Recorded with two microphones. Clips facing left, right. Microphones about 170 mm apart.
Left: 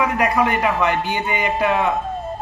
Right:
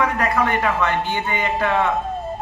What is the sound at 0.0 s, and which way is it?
A man's voice, 15° left (ahead or behind).